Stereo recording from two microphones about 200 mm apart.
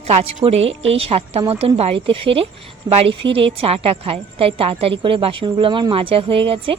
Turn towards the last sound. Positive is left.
turn(degrees=-25)  # may be behind; listen again after turning